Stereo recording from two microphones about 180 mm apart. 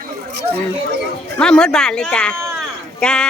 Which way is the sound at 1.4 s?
5° left (ahead or behind).